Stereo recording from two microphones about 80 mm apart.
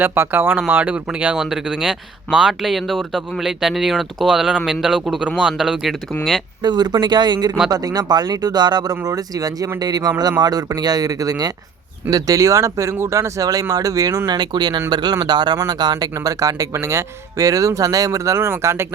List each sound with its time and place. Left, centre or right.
0.0 s speech: right
1.4 s speech: centre
6.6 s speech: right
14.3 s speech: right